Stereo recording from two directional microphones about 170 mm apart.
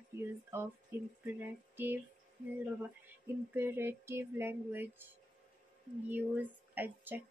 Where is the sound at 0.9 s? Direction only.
15° right (ahead or behind).